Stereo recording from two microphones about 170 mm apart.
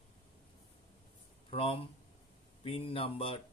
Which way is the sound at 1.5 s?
35° left (ahead or behind).